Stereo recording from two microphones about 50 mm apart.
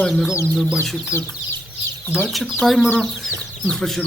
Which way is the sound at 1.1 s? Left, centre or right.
Left.